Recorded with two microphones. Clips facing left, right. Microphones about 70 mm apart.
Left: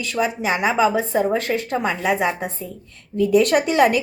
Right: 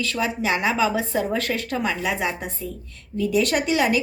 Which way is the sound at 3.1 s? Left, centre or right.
Left.